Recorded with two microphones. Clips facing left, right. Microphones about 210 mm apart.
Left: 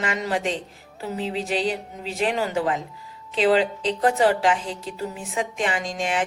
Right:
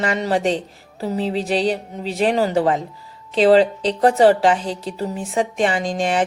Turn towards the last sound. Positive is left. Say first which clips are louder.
# right 6 dB
turn(degrees=-35)  # may be behind; listen again after turning